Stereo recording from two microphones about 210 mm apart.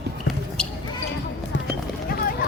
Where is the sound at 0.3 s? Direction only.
5° left (ahead or behind).